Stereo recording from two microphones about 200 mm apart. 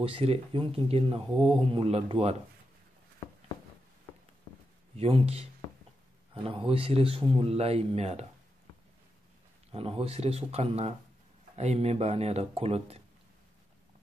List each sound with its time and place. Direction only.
0.0 s speech: 30° right (ahead or behind)
4.9 s speech: 30° right (ahead or behind)
9.7 s speech: 30° right (ahead or behind)